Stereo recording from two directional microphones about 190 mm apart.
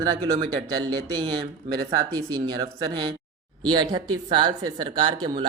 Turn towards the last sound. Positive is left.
turn(degrees=-25)  # may be behind; listen again after turning